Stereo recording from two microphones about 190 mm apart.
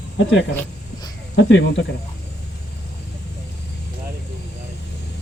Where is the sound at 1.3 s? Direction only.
65° left (ahead or behind).